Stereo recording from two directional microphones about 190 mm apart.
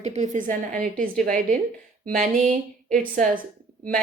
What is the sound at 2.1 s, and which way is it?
Speech, 45° right (ahead or behind).